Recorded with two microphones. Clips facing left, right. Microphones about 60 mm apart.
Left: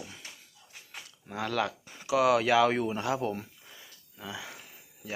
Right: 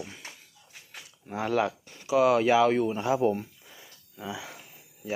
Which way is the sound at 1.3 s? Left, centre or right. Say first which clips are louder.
Right 4 dB; centre.